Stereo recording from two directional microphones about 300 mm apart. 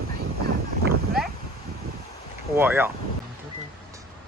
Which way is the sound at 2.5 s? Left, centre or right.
Centre.